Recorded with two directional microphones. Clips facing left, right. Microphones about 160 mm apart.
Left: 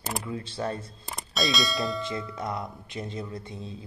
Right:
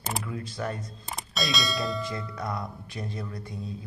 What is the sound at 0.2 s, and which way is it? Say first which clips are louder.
Speech: left 1 dB; 30° left (ahead or behind).